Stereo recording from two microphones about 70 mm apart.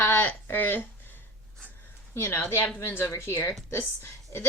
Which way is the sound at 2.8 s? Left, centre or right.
Left.